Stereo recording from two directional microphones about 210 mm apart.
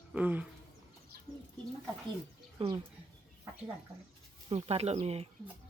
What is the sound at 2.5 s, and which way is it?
Speech, 25° right (ahead or behind).